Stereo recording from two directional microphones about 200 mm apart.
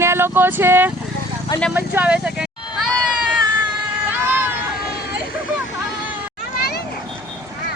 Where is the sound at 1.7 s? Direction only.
10° right (ahead or behind).